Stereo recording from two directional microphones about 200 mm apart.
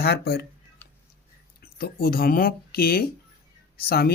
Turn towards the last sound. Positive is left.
turn(degrees=50)  # may be behind; listen again after turning